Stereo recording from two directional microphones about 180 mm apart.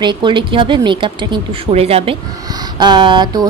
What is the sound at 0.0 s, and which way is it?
A woman's voice, 25° right (ahead or behind).